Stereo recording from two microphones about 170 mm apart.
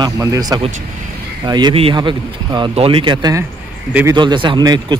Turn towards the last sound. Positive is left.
turn(degrees=-25)  # may be behind; listen again after turning